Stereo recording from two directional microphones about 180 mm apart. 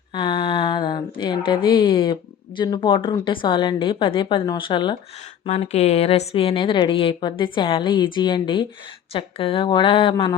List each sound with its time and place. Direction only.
0.1 s a sound: 30° left (ahead or behind)
1.5 s a woman's voice: 30° left (ahead or behind)
5.5 s a woman's voice: 35° left (ahead or behind)